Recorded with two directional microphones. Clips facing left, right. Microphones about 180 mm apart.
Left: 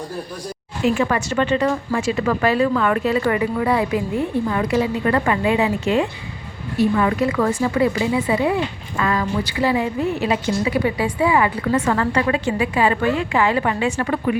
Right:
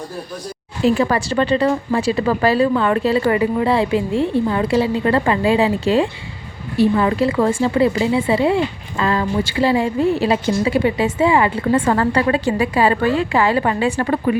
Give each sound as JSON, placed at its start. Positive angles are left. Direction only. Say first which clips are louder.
{"t": 0.9, "sound": "a woman's voice", "louder": "right 3 dB", "side_deg": -35}